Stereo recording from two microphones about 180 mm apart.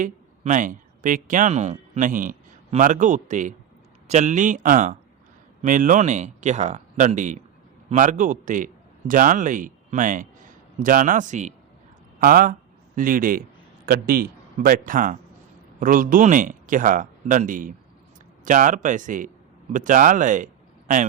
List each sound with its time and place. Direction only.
0.0 s a man's voice: 45° right (ahead or behind)